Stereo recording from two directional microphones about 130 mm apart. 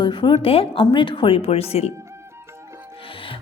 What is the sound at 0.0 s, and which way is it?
A woman's voice, 40° left (ahead or behind).